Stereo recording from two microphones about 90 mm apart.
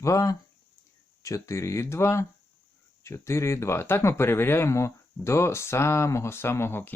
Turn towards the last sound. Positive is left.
turn(degrees=25)  # may be behind; listen again after turning